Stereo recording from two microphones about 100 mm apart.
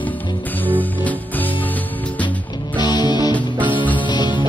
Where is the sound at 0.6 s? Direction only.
15° left (ahead or behind).